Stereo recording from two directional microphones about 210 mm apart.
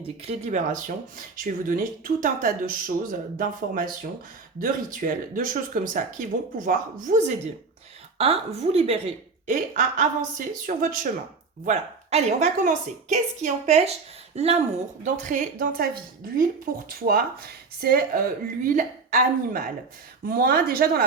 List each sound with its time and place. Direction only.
0.2 s a woman's voice: 30° right (ahead or behind)